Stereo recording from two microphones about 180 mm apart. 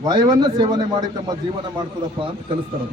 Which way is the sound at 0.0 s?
20° right (ahead or behind).